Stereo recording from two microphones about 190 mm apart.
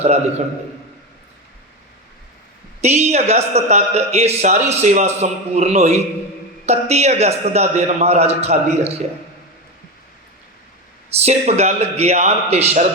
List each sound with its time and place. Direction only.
0.0 s a man's voice: 35° right (ahead or behind)
2.8 s a man's voice: 35° right (ahead or behind)
11.3 s a man's voice: 35° right (ahead or behind)